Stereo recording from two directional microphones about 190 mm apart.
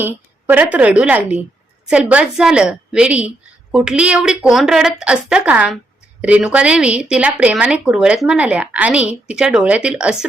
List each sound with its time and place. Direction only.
0.0 s a woman's voice: 10° right (ahead or behind)